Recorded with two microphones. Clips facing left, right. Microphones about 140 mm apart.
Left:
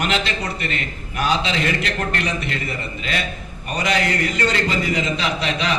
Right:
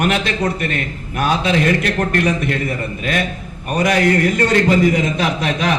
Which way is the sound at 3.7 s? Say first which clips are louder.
Right 6 dB; 50° right (ahead or behind).